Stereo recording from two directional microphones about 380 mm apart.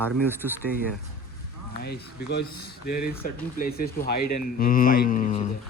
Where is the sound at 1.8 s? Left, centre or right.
Left.